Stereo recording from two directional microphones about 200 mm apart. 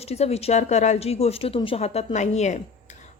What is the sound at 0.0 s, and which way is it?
A woman's voice, 30° left (ahead or behind).